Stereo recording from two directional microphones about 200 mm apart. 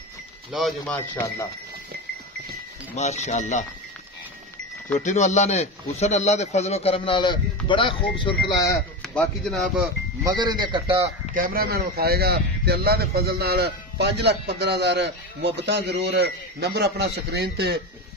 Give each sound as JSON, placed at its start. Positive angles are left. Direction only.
{"t": 0.5, "sound": "speech", "side_deg": 0}
{"t": 3.0, "sound": "speech", "side_deg": 35}
{"t": 4.9, "sound": "speech", "side_deg": 35}
{"t": 9.0, "sound": "speech", "side_deg": 5}
{"t": 10.2, "sound": "a man's voice", "side_deg": -20}
{"t": 11.3, "sound": "a man's voice", "side_deg": -45}